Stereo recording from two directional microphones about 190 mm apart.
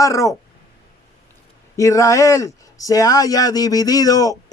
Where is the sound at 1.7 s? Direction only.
15° left (ahead or behind).